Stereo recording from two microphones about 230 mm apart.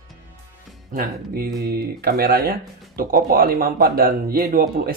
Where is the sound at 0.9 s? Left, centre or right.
Right.